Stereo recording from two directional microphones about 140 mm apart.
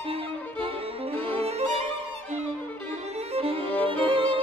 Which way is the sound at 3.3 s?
45° right (ahead or behind).